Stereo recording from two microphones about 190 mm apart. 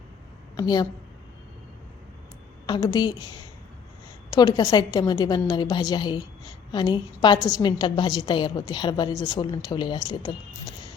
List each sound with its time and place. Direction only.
0.5 s a woman's voice: 20° left (ahead or behind)
2.6 s a woman's voice: 20° left (ahead or behind)
4.3 s a woman's voice: 20° left (ahead or behind)